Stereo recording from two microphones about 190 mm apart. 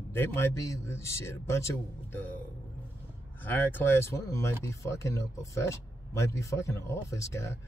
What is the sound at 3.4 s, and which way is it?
Speech, 10° left (ahead or behind).